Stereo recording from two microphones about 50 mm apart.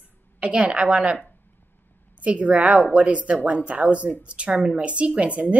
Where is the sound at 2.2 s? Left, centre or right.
Right.